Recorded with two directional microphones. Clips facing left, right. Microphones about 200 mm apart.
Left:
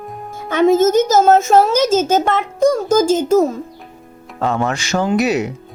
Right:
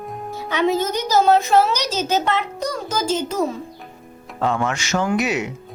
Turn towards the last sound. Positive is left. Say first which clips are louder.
# left 5 dB
turn(degrees=35)  # may be behind; listen again after turning